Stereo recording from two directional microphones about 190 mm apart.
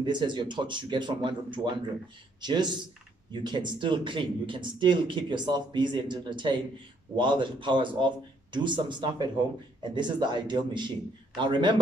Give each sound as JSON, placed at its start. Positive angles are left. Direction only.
{"t": 0.0, "sound": "speech", "side_deg": -25}